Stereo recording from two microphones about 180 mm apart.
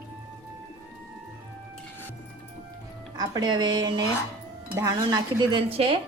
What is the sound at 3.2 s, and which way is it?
Speech, 25° right (ahead or behind).